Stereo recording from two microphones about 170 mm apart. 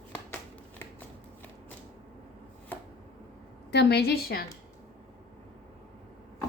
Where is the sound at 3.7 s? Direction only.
80° left.